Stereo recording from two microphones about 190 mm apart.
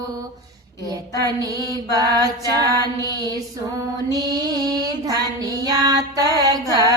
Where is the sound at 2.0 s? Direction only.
20° right (ahead or behind).